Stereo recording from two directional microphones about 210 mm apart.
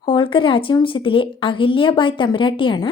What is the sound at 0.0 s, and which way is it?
Speech, 25° left (ahead or behind).